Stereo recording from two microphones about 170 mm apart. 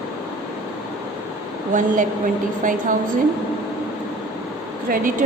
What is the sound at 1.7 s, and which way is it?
A woman's voice, 50° right (ahead or behind).